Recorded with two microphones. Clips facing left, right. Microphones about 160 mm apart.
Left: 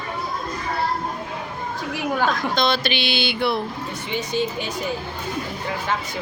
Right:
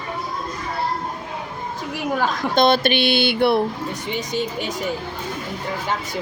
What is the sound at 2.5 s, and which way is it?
Speech, 50° right (ahead or behind).